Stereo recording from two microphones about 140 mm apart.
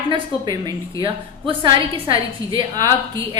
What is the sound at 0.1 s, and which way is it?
A woman's voice, 30° right (ahead or behind).